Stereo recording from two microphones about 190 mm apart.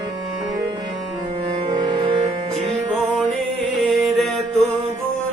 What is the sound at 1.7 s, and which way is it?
Music, 25° right (ahead or behind).